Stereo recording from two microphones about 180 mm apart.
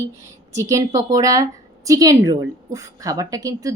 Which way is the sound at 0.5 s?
20° right (ahead or behind).